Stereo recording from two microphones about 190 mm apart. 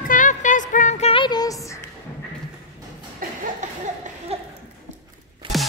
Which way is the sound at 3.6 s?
40° right (ahead or behind).